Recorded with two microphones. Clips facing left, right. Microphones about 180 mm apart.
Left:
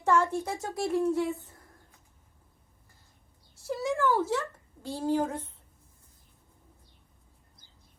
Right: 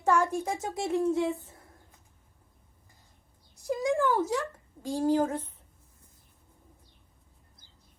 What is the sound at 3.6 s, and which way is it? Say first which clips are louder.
A woman's voice: right 2 dB; 15° right (ahead or behind).